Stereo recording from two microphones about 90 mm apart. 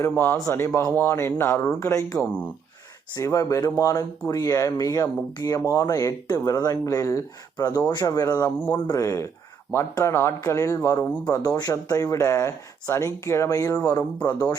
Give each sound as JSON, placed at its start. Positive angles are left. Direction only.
{"t": 0.4, "sound": "speech", "side_deg": 30}
{"t": 2.2, "sound": "speech", "side_deg": 15}
{"t": 3.2, "sound": "speech", "side_deg": 35}
{"t": 8.5, "sound": "speech", "side_deg": 20}
{"t": 8.9, "sound": "speech", "side_deg": 35}